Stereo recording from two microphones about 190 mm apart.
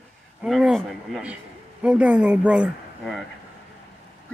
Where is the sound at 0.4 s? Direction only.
Centre (ahead or behind).